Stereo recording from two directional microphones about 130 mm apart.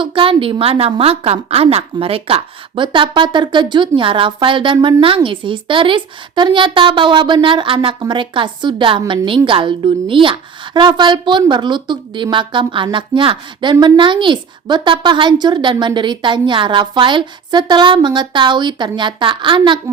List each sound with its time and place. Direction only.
0.0 s a woman's voice: 40° right (ahead or behind)